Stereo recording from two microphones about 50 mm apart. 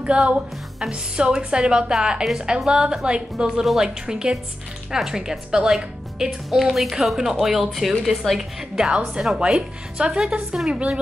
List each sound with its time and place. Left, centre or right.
0.0 s a woman's voice: right
6.5 s a woman's voice: centre